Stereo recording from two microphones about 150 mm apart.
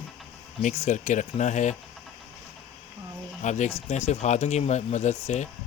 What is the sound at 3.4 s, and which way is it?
Speech, 55° left (ahead or behind).